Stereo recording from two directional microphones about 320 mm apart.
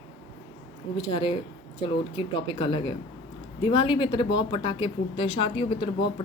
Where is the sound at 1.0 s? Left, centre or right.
Centre.